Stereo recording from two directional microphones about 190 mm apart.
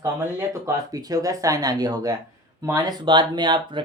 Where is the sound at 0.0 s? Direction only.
15° right (ahead or behind).